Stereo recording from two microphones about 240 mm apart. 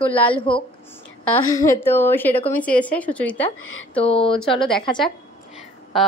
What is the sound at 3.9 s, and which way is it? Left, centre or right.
Speech, left.